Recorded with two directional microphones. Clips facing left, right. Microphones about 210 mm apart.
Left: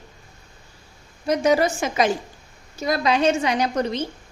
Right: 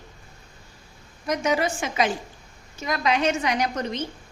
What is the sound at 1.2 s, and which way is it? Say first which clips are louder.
A woman's voice: left 5 dB; 35° left (ahead or behind).